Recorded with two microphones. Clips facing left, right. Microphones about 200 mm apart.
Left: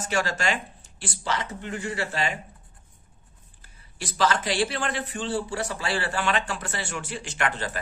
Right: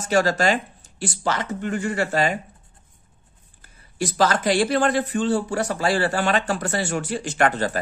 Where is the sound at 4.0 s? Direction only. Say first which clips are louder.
Right 5 dB; 45° right (ahead or behind).